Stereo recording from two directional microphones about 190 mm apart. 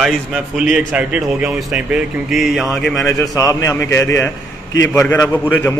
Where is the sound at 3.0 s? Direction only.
15° left (ahead or behind).